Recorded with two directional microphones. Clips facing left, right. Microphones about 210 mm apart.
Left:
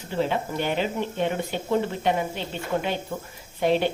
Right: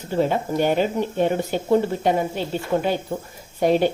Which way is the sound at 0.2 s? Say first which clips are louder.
Right 5 dB; 45° right (ahead or behind).